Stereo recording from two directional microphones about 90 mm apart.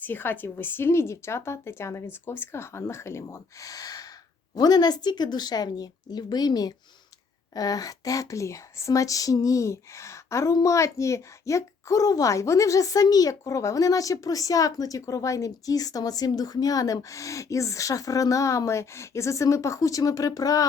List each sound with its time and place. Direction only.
0.0 s a woman's voice: 20° left (ahead or behind); by 20.7 s 40° left (ahead or behind)